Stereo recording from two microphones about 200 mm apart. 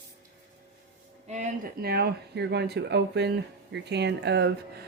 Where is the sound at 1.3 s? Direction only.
35° right (ahead or behind).